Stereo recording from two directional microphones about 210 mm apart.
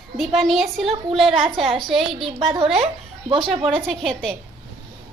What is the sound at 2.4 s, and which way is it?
A woman's voice, 30° right (ahead or behind).